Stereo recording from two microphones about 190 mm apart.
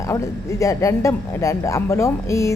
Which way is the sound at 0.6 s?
15° left (ahead or behind).